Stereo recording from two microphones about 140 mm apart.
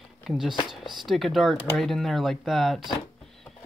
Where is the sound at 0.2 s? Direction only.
Centre (ahead or behind).